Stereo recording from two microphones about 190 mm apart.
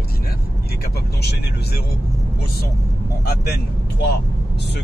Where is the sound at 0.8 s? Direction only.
55° left (ahead or behind).